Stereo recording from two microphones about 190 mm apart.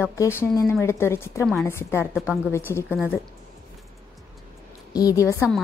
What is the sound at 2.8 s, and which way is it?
Speech, 10° right (ahead or behind).